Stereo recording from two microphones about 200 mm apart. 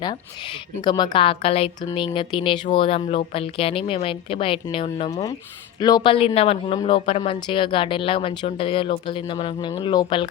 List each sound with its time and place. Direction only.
0.8 s a woman's voice: 20° left (ahead or behind)